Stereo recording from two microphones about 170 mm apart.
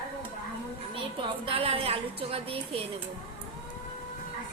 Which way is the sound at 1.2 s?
35° right (ahead or behind).